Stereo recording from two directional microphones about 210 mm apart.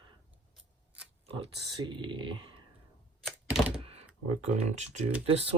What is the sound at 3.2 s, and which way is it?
Typewriter, 5° right (ahead or behind).